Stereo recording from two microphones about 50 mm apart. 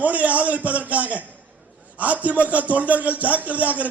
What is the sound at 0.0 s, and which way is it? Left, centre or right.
A man's voice, right.